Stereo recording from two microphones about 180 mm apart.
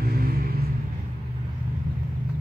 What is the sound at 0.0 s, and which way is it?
Vehicle, 55° right (ahead or behind).